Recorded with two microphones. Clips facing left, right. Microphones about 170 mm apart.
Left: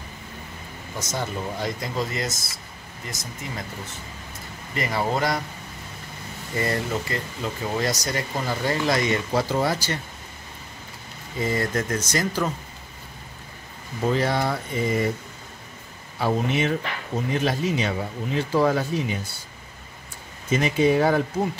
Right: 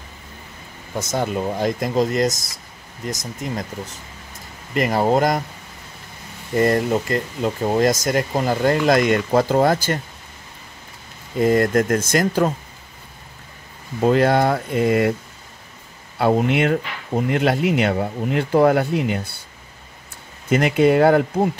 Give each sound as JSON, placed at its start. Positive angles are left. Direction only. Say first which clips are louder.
{"t": 1.1, "sound": "speech", "louder": "right 7 dB", "side_deg": -50}
{"t": 4.7, "sound": "speech", "louder": "right 7 dB", "side_deg": -50}
{"t": 6.5, "sound": "speech", "louder": "right 8 dB", "side_deg": -50}
{"t": 11.3, "sound": "speech", "louder": "right 9 dB", "side_deg": -55}
{"t": 14.0, "sound": "speech", "louder": "right 7 dB", "side_deg": -60}
{"t": 16.2, "sound": "speech", "louder": "right 6 dB", "side_deg": -65}
{"t": 20.4, "sound": "speech", "louder": "right 4 dB", "side_deg": -65}